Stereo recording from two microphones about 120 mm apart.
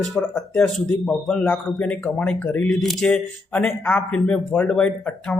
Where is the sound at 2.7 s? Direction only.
Centre (ahead or behind).